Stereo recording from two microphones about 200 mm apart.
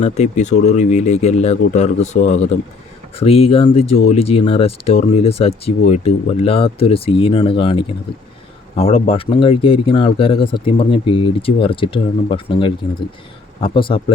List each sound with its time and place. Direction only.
0.0 s speech: 35° left (ahead or behind)